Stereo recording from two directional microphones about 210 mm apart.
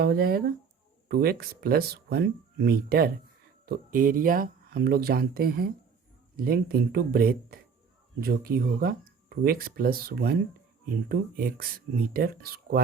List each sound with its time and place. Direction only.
0.0 s speech: 45° right (ahead or behind)